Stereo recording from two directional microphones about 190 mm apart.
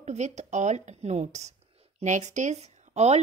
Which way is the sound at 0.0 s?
35° right (ahead or behind).